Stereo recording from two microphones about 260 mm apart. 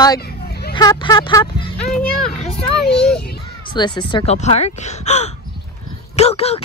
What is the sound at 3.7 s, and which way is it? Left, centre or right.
A woman's voice, centre.